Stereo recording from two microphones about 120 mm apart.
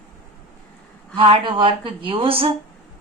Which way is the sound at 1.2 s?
45° right (ahead or behind).